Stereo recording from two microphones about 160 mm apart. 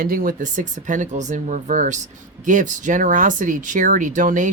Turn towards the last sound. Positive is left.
turn(degrees=-55)  # may be behind; listen again after turning